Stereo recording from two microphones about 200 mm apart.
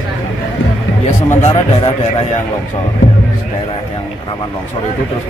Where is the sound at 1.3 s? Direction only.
30° left (ahead or behind).